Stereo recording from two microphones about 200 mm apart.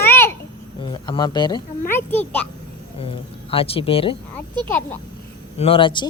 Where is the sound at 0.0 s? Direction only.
10° left (ahead or behind).